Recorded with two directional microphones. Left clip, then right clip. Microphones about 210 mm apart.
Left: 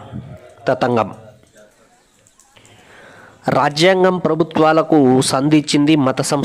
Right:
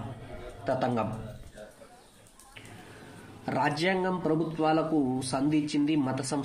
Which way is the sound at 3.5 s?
45° left (ahead or behind).